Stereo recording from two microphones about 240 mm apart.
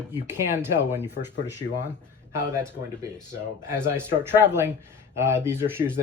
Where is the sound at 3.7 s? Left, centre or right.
Centre.